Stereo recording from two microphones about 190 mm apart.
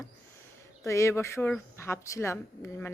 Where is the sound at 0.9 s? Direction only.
15° left (ahead or behind).